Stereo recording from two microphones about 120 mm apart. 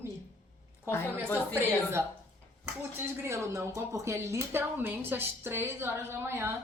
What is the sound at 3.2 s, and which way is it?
A woman's voice, 25° right (ahead or behind).